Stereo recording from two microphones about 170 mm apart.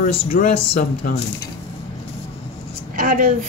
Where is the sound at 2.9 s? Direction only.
55° right (ahead or behind).